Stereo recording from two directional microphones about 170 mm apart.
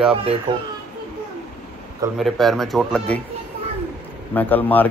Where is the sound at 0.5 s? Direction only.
25° right (ahead or behind).